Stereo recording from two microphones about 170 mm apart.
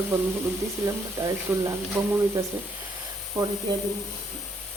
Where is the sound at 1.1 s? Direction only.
15° right (ahead or behind).